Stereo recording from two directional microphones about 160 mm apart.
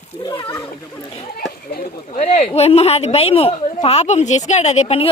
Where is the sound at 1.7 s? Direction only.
55° left (ahead or behind).